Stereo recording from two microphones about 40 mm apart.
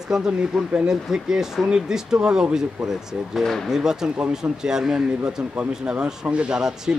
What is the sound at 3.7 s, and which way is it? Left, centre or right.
Speech, centre.